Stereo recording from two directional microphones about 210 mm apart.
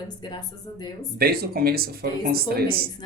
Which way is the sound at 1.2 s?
45° right (ahead or behind).